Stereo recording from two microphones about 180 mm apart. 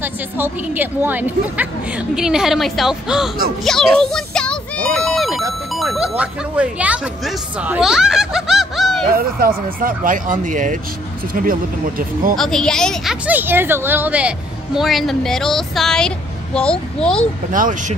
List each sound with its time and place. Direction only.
0.0 s a woman's voice: 10° right (ahead or behind)
9.1 s speech: 55° right (ahead or behind)
12.4 s a woman's voice: 5° left (ahead or behind)
17.5 s speech: 45° right (ahead or behind)